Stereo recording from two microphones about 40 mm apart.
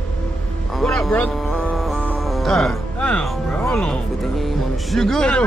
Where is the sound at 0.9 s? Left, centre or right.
Centre.